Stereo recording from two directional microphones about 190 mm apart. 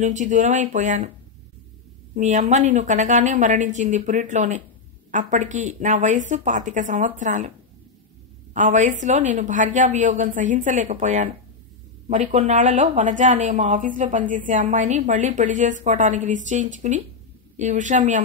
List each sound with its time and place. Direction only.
0.0 s a woman's voice: 40° right (ahead or behind)
2.1 s a woman's voice: 40° right (ahead or behind)
8.5 s a woman's voice: 40° right (ahead or behind)